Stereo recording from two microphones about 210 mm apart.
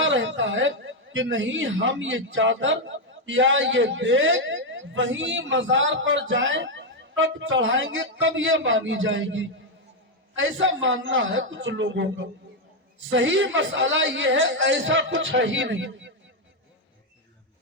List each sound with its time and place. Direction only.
0.0 s a man's voice: 60° right (ahead or behind)